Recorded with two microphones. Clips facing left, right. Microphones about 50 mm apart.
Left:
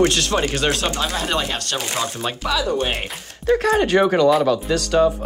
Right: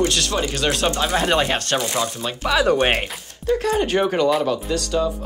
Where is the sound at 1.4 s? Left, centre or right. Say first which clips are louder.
Right 4 dB; right.